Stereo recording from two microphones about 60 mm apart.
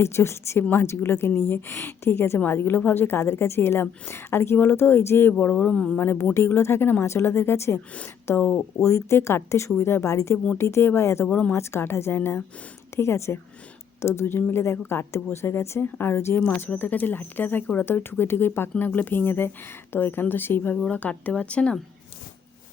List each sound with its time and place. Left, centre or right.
0.0 s a woman's voice: left
6.3 s speech: left
10.3 s speech: left
10.6 s speech: left
11.3 s speech: left
11.5 s speech: left
13.0 s speech: left
16.4 s a woman's voice: left
17.8 s a woman's voice: left
20.7 s speech: left